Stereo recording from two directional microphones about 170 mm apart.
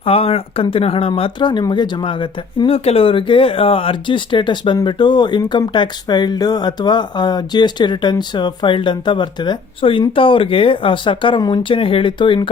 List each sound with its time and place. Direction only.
0.0 s speech: 35° left (ahead or behind)